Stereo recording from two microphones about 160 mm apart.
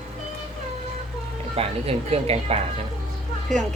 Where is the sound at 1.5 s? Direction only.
40° right (ahead or behind).